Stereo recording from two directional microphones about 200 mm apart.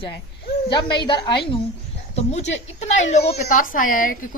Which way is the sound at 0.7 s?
20° left (ahead or behind).